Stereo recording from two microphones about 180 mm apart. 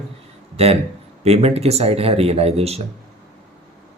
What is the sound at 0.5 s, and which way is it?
Speech, 35° right (ahead or behind).